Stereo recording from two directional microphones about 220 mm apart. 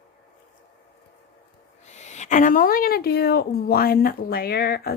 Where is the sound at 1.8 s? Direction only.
30° left (ahead or behind).